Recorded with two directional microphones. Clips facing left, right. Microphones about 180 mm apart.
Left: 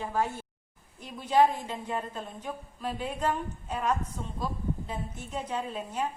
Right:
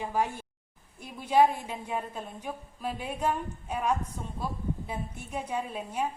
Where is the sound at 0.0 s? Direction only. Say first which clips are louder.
Even; 15° right (ahead or behind).